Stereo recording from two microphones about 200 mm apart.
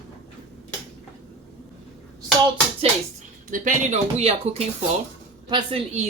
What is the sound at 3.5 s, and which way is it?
A man's voice, 40° right (ahead or behind).